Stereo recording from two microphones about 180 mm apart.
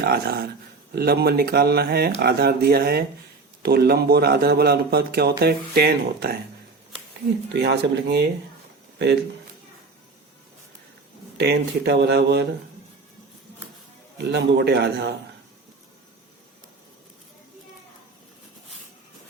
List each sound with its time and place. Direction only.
0.0 s a man's voice: 60° right (ahead or behind)
7.5 s a man's voice: 65° right (ahead or behind)
11.3 s speech: 65° right (ahead or behind)
14.2 s speech: 70° right (ahead or behind)